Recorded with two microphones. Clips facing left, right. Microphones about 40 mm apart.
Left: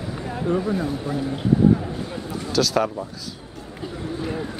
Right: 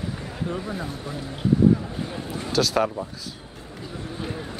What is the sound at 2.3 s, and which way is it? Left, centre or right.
Speech, right.